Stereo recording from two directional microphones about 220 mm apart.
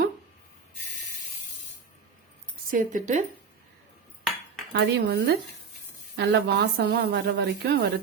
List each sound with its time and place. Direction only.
2.6 s speech: 35° right (ahead or behind)
4.7 s a woman's voice: 55° right (ahead or behind)